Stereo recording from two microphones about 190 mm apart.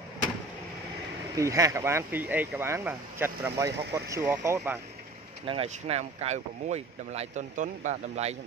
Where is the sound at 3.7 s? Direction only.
60° right (ahead or behind).